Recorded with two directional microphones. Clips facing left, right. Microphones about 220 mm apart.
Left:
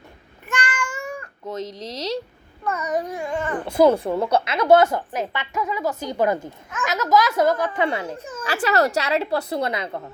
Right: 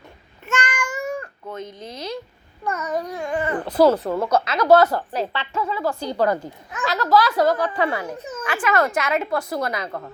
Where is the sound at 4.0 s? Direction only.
25° left (ahead or behind).